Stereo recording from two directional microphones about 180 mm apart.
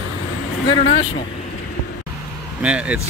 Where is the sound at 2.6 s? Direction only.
5° right (ahead or behind).